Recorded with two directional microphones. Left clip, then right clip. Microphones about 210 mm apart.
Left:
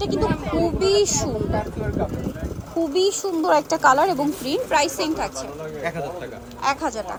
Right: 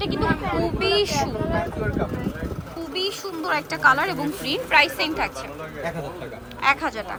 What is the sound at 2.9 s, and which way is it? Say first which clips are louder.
A woman's voice: left 5 dB; 30° left (ahead or behind).